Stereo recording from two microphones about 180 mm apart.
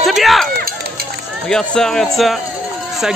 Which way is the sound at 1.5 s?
Centre (ahead or behind).